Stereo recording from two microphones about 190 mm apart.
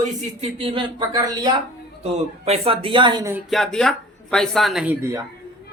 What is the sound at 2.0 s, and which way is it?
A man's voice, 35° right (ahead or behind).